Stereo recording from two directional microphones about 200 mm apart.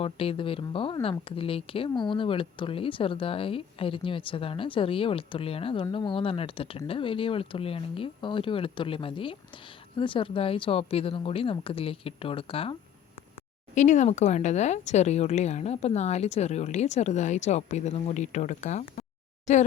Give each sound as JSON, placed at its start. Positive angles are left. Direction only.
{"t": 0.0, "sound": "speech", "side_deg": 30}
{"t": 13.7, "sound": "speech", "side_deg": 35}